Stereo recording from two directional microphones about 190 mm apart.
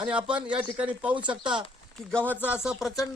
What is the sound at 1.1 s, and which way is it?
Speech, 25° right (ahead or behind).